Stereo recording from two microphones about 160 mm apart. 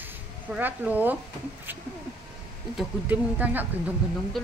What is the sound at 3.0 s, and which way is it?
Speech, 10° right (ahead or behind).